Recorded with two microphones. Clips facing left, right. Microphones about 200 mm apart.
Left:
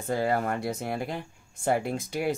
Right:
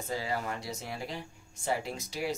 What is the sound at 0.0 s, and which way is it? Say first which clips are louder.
Speech: left 8 dB; 55° left (ahead or behind).